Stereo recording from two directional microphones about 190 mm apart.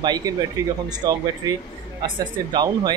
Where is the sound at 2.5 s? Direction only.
20° right (ahead or behind).